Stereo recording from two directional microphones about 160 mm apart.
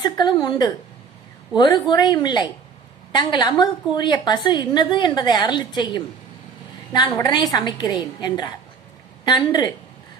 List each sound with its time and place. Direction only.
0.0 s a woman's voice: 25° left (ahead or behind)